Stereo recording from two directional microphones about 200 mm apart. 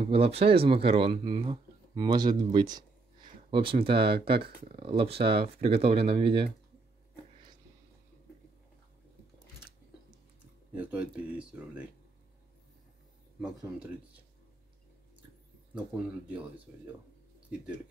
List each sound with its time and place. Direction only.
0.0 s speech: 30° right (ahead or behind)
10.7 s speech: 5° right (ahead or behind)
16.3 s speech: 10° right (ahead or behind)